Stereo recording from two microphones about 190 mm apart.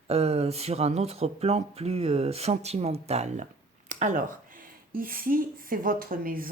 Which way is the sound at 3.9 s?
40° right (ahead or behind).